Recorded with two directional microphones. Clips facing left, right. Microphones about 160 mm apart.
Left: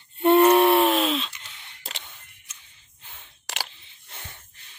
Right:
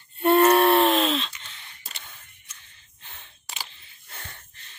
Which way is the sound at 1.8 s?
90° left.